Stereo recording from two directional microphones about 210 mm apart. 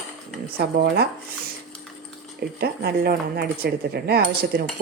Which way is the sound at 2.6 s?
50° right (ahead or behind).